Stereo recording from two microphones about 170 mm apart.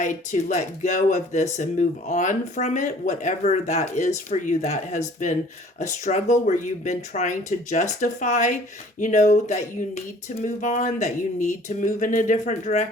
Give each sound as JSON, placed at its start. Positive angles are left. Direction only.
{"t": 0.0, "sound": "speech", "side_deg": 45}